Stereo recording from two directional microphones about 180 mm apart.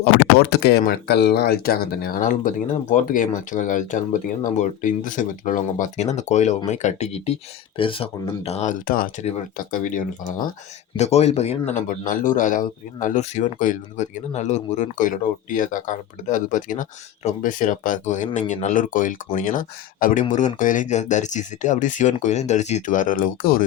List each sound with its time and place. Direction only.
0.0 s speech: 60° left (ahead or behind)
10.9 s speech: 35° left (ahead or behind)